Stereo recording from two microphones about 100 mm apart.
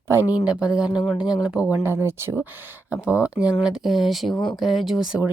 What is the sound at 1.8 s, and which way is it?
Speech, 25° right (ahead or behind).